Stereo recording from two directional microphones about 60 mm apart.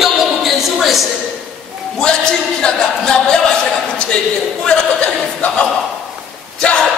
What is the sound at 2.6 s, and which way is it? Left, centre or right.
Speech, centre.